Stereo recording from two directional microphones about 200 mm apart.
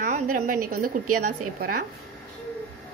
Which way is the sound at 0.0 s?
40° right (ahead or behind).